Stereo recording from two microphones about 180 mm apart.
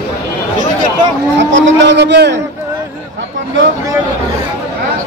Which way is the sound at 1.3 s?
80° right.